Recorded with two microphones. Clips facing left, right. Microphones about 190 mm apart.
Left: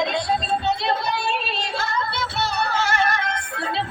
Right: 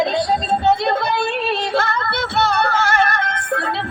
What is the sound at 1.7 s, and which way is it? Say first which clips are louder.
Music: right 6 dB; 60° right (ahead or behind).